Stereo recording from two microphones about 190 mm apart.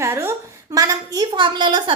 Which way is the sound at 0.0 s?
15° right (ahead or behind).